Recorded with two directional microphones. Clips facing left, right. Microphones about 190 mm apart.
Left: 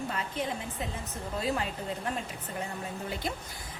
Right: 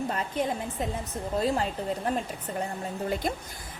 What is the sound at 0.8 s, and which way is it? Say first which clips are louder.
Speech: right 7 dB; 45° right (ahead or behind).